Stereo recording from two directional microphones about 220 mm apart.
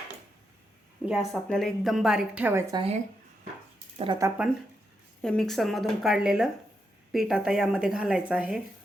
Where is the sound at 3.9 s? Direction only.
20° right (ahead or behind).